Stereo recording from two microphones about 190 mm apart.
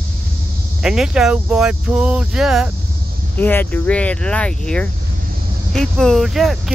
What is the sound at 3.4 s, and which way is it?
Speech, 10° left (ahead or behind).